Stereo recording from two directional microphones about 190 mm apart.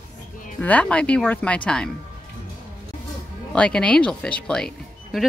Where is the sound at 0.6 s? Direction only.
10° left (ahead or behind).